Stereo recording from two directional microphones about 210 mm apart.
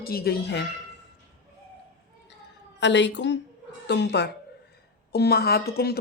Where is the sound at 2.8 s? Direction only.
55° left (ahead or behind).